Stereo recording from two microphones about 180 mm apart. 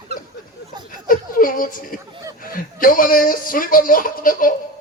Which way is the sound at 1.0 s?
50° left (ahead or behind).